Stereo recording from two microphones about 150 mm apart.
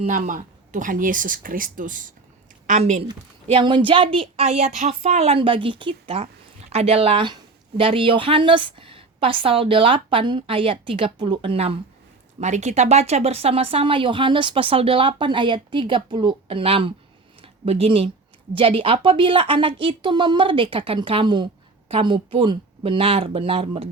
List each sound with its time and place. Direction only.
0.0 s speech: 60° right (ahead or behind)
2.6 s a woman's voice: 50° right (ahead or behind)
3.4 s a woman's voice: 35° right (ahead or behind)
12.4 s a woman's voice: 50° right (ahead or behind)